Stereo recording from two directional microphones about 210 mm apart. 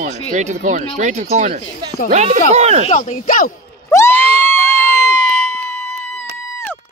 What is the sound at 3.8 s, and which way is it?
Screaming, 10° left (ahead or behind).